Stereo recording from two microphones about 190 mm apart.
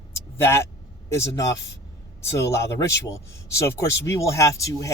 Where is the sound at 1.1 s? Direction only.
15° left (ahead or behind).